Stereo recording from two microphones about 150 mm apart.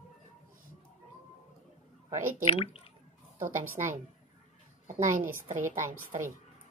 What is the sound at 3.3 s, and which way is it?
Speech, 60° right (ahead or behind).